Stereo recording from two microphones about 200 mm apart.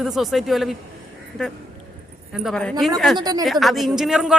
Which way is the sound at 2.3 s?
Centre (ahead or behind).